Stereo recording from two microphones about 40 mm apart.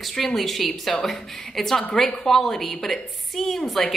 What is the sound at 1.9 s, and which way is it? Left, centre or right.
Speech, left.